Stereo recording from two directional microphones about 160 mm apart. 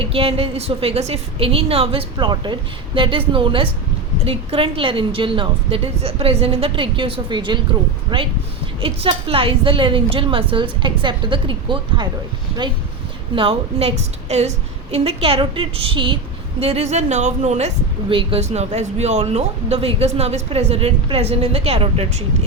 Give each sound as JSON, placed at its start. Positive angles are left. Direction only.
{"t": 0.0, "sound": "speech", "side_deg": -35}
{"t": 13.3, "sound": "a woman's voice", "side_deg": -35}
{"t": 18.1, "sound": "speech", "side_deg": -35}